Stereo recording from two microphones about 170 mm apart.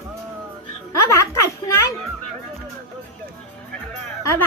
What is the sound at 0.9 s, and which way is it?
Music, 15° left (ahead or behind).